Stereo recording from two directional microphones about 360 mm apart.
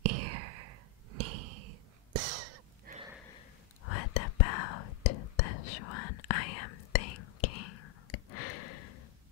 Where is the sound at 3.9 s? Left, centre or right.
Left.